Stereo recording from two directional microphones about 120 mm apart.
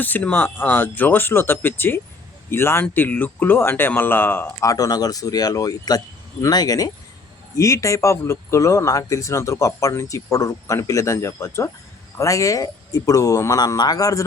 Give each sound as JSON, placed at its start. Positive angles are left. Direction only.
{"t": 0.0, "sound": "speech", "side_deg": 15}
{"t": 4.6, "sound": "speech", "side_deg": 30}